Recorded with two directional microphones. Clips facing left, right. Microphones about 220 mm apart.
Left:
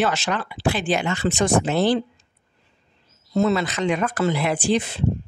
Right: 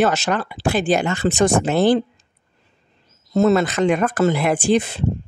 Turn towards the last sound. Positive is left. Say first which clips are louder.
# right 4 dB
turn(degrees=-50)  # may be behind; listen again after turning